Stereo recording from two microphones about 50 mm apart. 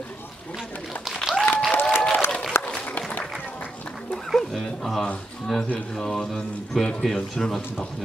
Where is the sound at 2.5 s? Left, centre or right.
Left.